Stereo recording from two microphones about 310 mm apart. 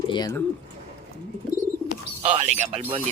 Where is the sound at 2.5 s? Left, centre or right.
Centre.